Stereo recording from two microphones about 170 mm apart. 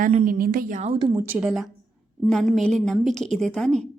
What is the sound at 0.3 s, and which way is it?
Speech, 60° right (ahead or behind).